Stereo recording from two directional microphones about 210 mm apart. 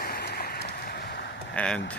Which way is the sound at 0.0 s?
45° left (ahead or behind).